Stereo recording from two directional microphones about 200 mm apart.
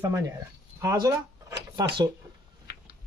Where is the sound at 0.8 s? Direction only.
15° right (ahead or behind).